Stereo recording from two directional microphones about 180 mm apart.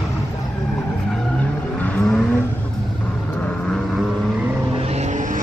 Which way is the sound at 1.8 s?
5° left (ahead or behind).